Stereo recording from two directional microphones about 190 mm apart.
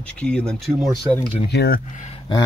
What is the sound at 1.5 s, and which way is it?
Speech, 60° left (ahead or behind).